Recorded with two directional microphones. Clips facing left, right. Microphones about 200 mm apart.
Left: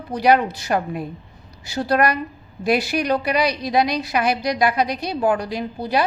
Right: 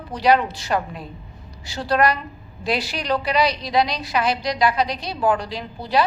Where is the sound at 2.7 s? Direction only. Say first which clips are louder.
Left 4 dB; 55° left (ahead or behind).